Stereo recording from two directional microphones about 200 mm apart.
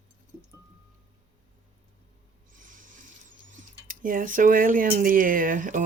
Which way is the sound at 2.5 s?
40° right (ahead or behind).